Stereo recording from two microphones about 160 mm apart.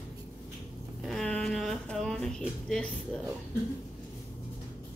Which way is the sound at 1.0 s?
5° left (ahead or behind).